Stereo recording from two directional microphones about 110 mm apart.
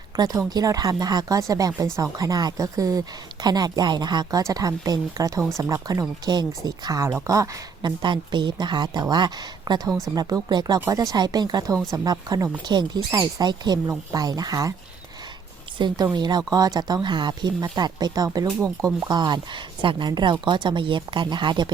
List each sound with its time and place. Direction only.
0.2 s a woman's voice: 35° right (ahead or behind)
16.1 s a woman's voice: 40° right (ahead or behind)
19.0 s speech: 40° right (ahead or behind)